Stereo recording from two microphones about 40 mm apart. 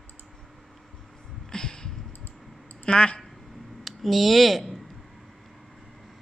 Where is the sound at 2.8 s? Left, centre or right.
Left.